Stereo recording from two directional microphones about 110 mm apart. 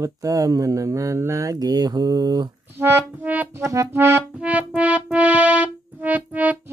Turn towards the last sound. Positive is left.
turn(degrees=-15)  # may be behind; listen again after turning